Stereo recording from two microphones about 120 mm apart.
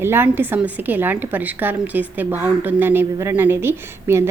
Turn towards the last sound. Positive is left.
turn(degrees=-20)  # may be behind; listen again after turning